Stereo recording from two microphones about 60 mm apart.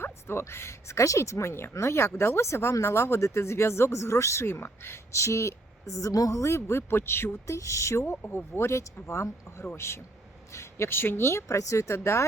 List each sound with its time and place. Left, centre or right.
0.0 s speech: left
5.1 s a woman's voice: left
7.4 s a woman's voice: left